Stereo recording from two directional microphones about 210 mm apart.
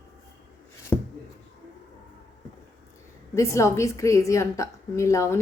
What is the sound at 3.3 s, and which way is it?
A woman's voice, 15° left (ahead or behind).